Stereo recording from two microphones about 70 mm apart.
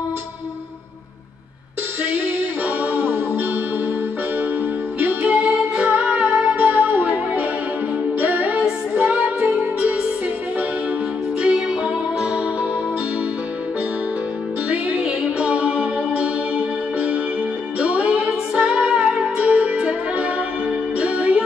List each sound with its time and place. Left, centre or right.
2.0 s music: right
4.9 s music: right
11.4 s music: centre
15.0 s music: centre